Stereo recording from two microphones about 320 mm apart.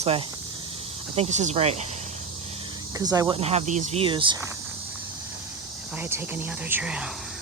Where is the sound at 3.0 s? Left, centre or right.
Centre.